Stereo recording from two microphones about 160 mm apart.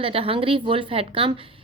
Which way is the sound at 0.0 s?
35° right (ahead or behind).